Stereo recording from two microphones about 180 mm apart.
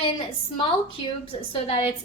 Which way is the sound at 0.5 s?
30° left (ahead or behind).